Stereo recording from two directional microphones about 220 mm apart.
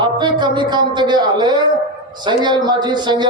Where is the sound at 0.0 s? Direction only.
20° right (ahead or behind).